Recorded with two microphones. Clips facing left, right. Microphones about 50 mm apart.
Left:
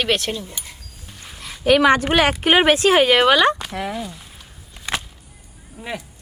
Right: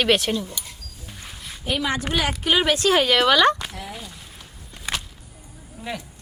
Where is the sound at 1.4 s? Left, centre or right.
Left.